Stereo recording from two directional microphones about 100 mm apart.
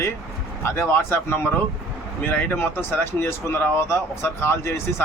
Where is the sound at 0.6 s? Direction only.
25° left (ahead or behind).